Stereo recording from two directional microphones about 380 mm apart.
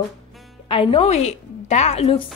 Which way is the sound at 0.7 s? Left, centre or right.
Centre.